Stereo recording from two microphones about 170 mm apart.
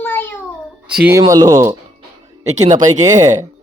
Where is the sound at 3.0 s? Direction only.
20° right (ahead or behind).